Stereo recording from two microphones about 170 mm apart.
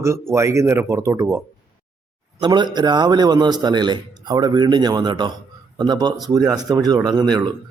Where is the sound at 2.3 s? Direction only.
25° right (ahead or behind).